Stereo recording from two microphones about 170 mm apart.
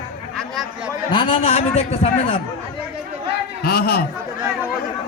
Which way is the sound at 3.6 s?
65° left (ahead or behind).